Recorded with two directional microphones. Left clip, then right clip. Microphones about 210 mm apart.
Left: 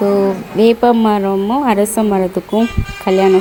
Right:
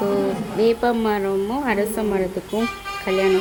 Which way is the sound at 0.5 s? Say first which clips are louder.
Left 8 dB; 35° left (ahead or behind).